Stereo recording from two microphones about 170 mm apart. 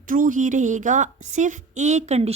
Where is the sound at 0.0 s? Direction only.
50° right (ahead or behind).